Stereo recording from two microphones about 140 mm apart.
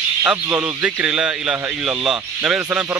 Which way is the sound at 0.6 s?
5° right (ahead or behind).